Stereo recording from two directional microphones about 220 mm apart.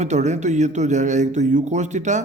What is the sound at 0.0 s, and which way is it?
Speech, 30° right (ahead or behind).